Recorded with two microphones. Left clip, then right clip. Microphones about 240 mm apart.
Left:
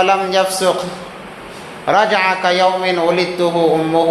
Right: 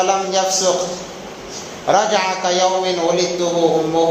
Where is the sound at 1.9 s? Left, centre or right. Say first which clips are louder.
Left 2 dB; left.